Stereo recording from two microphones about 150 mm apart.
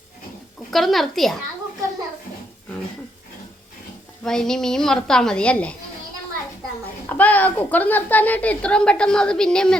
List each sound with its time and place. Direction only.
0.7 s a woman's voice: centre (ahead or behind)
4.2 s a woman's voice: 5° left (ahead or behind)
7.1 s a woman's voice: 10° left (ahead or behind)